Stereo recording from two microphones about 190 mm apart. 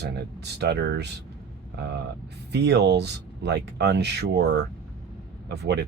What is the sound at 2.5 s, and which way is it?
Speech, 60° right (ahead or behind).